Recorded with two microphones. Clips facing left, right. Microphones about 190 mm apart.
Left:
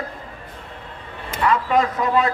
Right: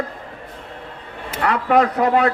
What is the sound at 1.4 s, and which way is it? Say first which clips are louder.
Speech: right 2 dB; 70° right (ahead or behind).